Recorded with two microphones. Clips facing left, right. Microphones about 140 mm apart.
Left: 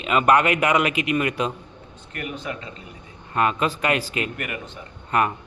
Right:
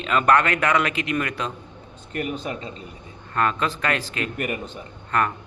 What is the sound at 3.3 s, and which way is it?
Speech, 15° left (ahead or behind).